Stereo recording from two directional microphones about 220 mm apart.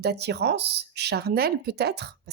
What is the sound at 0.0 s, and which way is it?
Speech, 50° right (ahead or behind).